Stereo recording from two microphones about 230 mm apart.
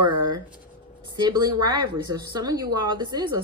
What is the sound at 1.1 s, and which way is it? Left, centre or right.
Speech, centre.